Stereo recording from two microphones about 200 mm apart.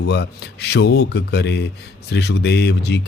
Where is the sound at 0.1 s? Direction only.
55° left (ahead or behind).